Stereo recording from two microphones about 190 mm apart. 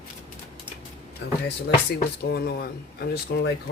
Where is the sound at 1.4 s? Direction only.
60° left (ahead or behind).